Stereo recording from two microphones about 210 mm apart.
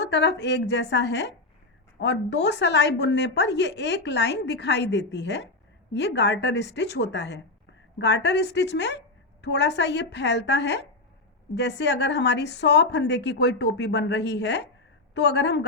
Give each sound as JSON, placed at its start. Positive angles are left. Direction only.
{"t": 0.0, "sound": "a woman's voice", "side_deg": 55}